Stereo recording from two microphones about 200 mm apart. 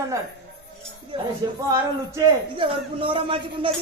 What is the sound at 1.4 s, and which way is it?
Speech, 20° right (ahead or behind).